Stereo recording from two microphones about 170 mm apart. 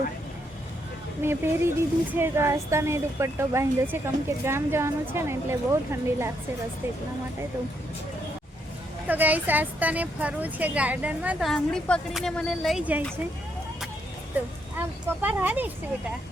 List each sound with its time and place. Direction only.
1.2 s speech: 15° right (ahead or behind)
9.0 s speech: 10° right (ahead or behind)
14.8 s speech: 10° right (ahead or behind)